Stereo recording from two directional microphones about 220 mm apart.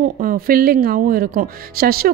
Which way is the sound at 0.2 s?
40° right (ahead or behind).